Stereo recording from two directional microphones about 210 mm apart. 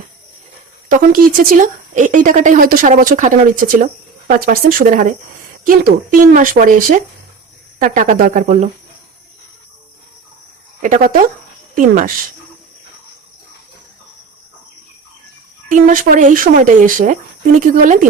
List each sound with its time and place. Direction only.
0.9 s speech: 40° right (ahead or behind)
10.8 s speech: 40° right (ahead or behind)
15.7 s speech: 40° right (ahead or behind)